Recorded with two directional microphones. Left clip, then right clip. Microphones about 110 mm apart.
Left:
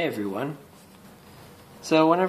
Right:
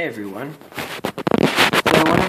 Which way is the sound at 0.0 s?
Centre (ahead or behind).